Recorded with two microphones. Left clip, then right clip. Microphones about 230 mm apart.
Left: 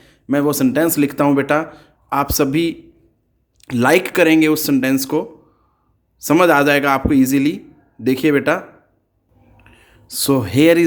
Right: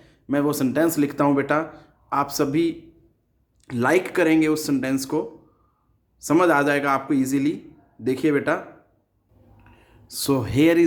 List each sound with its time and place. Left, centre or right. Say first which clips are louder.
0.0 s speech: left 5 dB; left
9.6 s speech: left 7 dB; left